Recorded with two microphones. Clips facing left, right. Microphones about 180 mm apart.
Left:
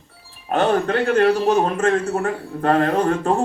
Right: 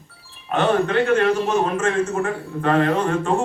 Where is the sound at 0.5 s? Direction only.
35° left (ahead or behind).